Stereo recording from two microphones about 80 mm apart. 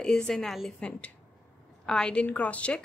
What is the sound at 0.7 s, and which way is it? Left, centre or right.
A woman's voice, centre.